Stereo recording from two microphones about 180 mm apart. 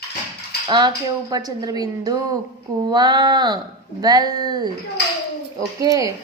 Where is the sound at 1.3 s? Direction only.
20° right (ahead or behind).